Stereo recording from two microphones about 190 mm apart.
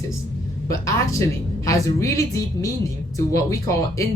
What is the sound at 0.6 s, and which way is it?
A woman's voice, 15° left (ahead or behind).